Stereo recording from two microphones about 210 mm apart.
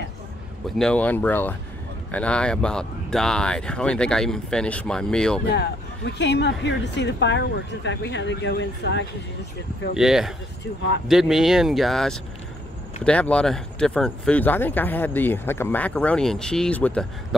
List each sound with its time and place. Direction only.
0.7 s speech: 5° left (ahead or behind)
5.5 s speech: 55° left (ahead or behind)
9.9 s speech: centre (ahead or behind)